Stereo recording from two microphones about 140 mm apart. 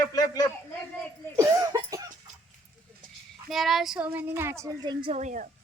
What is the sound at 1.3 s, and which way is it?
Speech, 25° right (ahead or behind).